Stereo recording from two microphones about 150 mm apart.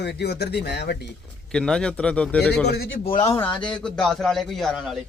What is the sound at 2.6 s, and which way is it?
Speech, 90° left.